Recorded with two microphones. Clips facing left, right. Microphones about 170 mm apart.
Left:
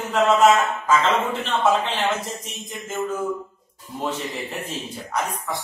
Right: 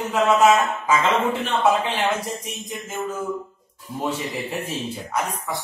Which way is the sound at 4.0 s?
10° right (ahead or behind).